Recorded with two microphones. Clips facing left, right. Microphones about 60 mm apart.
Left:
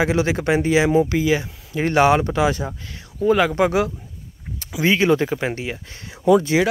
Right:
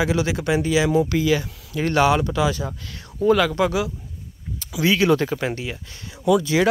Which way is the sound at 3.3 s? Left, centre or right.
Left.